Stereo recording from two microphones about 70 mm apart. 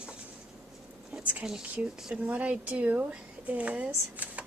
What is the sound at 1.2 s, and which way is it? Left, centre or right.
A woman's voice, right.